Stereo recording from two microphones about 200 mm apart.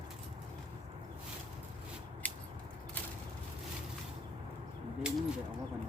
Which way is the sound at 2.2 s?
10° left (ahead or behind).